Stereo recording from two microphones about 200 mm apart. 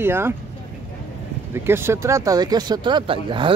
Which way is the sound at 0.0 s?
10° right (ahead or behind).